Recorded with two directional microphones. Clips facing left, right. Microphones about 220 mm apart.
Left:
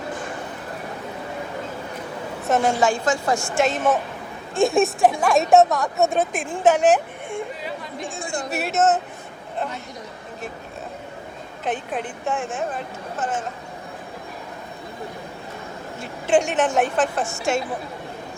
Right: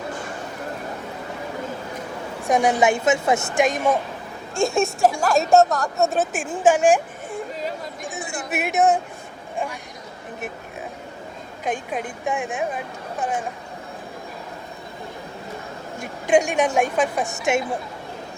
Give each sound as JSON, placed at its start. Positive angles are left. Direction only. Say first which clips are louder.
{"t": 2.5, "sound": "a woman's voice", "louder": "right 1 dB", "side_deg": -15}
{"t": 4.5, "sound": "a woman's voice", "louder": "left 3 dB", "side_deg": 0}
{"t": 8.1, "sound": "speech", "louder": "left 1 dB", "side_deg": -15}
{"t": 11.6, "sound": "a woman's voice", "louder": "even", "side_deg": -10}
{"t": 16.2, "sound": "a woman's voice", "louder": "right 1 dB", "side_deg": -10}